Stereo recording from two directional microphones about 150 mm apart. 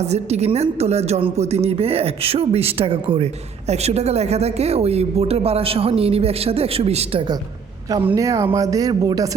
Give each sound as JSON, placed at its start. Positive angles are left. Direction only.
{"t": 0.0, "sound": "a woman's voice", "side_deg": -45}
{"t": 8.0, "sound": "speech", "side_deg": -20}